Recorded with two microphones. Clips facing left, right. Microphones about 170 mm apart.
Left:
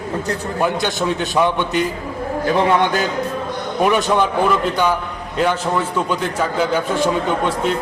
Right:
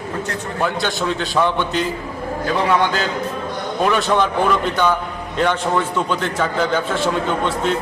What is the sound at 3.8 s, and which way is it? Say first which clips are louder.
A man's voice: left 1 dB; 15° left (ahead or behind).